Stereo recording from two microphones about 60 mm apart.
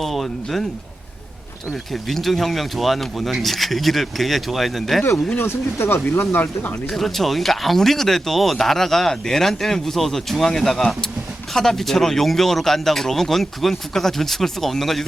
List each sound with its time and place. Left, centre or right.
0.0 s speech: centre
1.9 s speech: centre
5.4 s speech: left
6.9 s speech: centre